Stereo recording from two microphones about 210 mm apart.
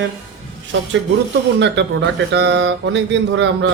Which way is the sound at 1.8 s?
55° right (ahead or behind).